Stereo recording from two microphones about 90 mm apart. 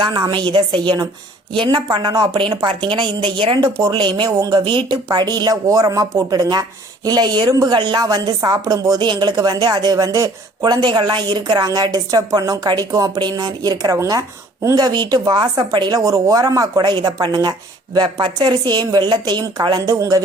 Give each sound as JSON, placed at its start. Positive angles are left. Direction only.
{"t": 0.0, "sound": "a woman's voice", "side_deg": -55}
{"t": 4.3, "sound": "speech", "side_deg": -40}
{"t": 4.6, "sound": "a woman's voice", "side_deg": -65}
{"t": 5.0, "sound": "speech", "side_deg": -50}
{"t": 9.0, "sound": "speech", "side_deg": -55}
{"t": 11.5, "sound": "a woman's voice", "side_deg": -45}